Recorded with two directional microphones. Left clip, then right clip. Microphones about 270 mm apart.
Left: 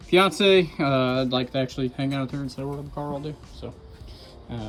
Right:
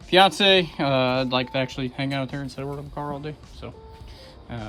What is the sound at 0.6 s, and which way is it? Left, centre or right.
Speech, centre.